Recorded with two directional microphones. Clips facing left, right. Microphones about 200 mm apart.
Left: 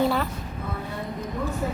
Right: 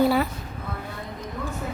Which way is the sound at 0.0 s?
5° right (ahead or behind).